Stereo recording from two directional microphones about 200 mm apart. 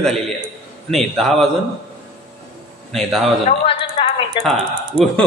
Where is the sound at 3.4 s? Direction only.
25° left (ahead or behind).